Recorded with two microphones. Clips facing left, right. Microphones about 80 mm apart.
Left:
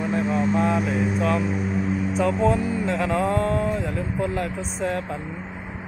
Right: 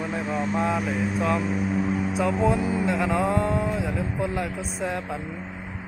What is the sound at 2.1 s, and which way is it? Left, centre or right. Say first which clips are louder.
Speech: left 2 dB; centre.